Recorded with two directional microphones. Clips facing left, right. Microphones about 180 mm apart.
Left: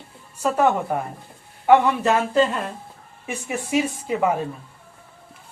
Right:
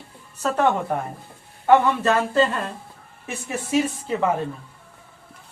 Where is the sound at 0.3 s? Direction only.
10° left (ahead or behind).